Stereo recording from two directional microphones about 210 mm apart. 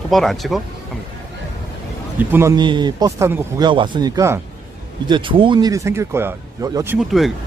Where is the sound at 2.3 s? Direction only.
15° right (ahead or behind).